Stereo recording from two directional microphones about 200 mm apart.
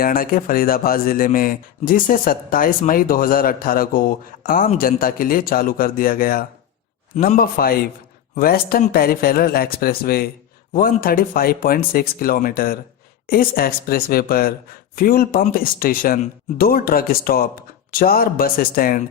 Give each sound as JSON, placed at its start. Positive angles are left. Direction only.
{"t": 0.0, "sound": "speech", "side_deg": 45}